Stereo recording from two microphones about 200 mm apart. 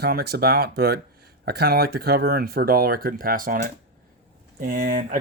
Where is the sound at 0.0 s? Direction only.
50° right (ahead or behind).